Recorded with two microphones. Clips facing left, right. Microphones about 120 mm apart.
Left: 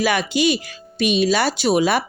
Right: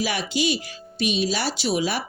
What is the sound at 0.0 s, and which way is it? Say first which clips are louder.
Speech: left 6 dB; 60° left (ahead or behind).